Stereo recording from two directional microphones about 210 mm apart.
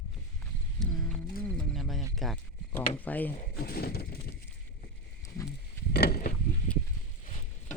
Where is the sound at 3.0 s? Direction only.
10° left (ahead or behind).